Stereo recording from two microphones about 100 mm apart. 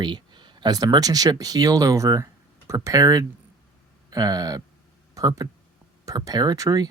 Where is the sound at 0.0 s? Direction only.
45° right (ahead or behind).